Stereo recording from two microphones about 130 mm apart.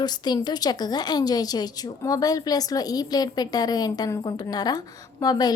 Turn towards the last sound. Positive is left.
turn(degrees=30)  # may be behind; listen again after turning